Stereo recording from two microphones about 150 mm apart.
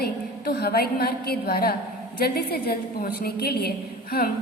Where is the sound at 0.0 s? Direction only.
90° left.